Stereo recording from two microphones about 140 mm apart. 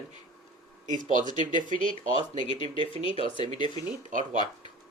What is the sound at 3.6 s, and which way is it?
Speech, 60° right (ahead or behind).